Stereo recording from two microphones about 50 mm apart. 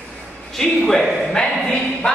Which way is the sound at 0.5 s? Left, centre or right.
Centre.